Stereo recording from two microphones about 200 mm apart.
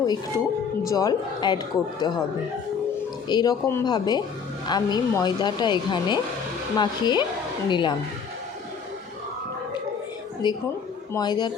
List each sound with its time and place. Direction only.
0.9 s speech: 20° left (ahead or behind)
3.2 s speech: 20° left (ahead or behind)
10.4 s speech: 20° left (ahead or behind)